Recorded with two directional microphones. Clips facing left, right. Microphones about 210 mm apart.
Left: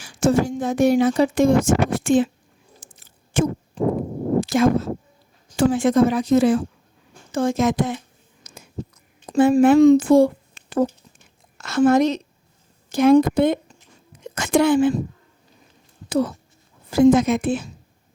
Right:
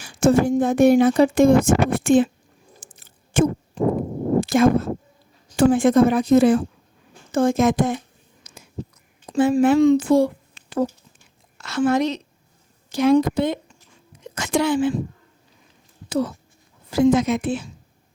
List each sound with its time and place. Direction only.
0.0 s speech: 55° right (ahead or behind)
2.8 s a sound: 55° right (ahead or behind)
3.8 s speech: 50° right (ahead or behind)
8.4 s a sound: 50° left (ahead or behind)
9.3 s a woman's voice: 50° left (ahead or behind)
16.0 s a woman's voice: 55° left (ahead or behind)